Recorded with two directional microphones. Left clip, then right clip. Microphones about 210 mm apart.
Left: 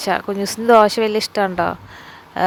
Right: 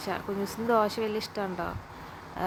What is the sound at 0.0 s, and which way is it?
Speech, 40° left (ahead or behind).